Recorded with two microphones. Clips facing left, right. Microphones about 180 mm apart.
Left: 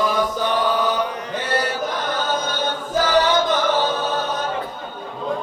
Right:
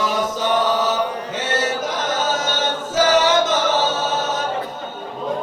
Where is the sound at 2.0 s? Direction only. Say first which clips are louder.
Right 2 dB; 90° right.